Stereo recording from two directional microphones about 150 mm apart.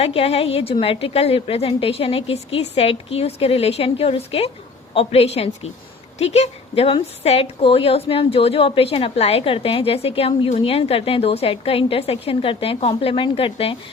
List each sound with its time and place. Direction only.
0.0 s a woman's voice: 40° left (ahead or behind)